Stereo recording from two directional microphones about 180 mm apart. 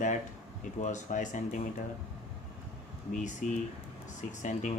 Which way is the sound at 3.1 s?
45° left (ahead or behind).